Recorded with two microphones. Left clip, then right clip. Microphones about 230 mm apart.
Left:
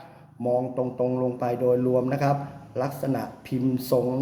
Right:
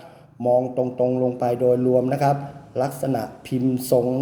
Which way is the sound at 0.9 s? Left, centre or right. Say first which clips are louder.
Right 5 dB; centre.